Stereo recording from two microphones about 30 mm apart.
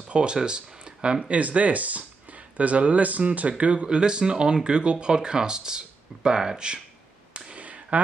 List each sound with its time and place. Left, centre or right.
0.1 s speech: right
1.4 s speech: right
3.5 s speech: right
7.5 s a sound: right